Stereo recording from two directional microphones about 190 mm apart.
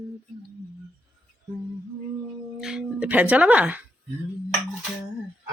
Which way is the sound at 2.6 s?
5° right (ahead or behind).